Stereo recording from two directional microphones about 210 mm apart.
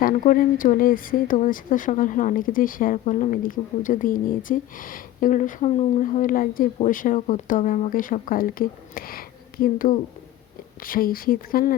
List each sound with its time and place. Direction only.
0.0 s speech: 40° left (ahead or behind)